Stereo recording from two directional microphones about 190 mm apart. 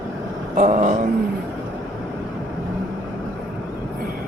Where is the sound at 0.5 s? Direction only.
40° right (ahead or behind).